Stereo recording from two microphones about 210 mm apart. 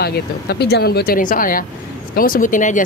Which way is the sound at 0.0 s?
50° left (ahead or behind).